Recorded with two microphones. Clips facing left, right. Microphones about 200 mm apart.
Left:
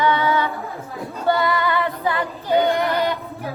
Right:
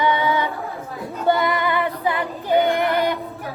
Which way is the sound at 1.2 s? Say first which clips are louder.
Even; 15° right (ahead or behind).